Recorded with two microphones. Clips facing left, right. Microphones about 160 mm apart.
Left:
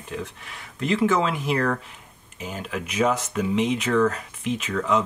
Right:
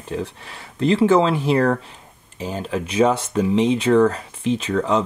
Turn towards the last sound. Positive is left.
turn(degrees=-30)  # may be behind; listen again after turning